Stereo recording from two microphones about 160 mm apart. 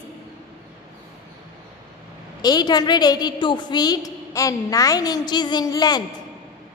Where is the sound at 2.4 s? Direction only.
25° left (ahead or behind).